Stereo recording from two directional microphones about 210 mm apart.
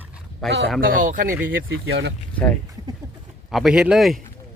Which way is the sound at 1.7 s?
65° right (ahead or behind).